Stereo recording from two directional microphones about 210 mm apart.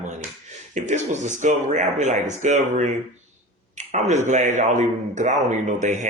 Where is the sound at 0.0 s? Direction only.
35° right (ahead or behind).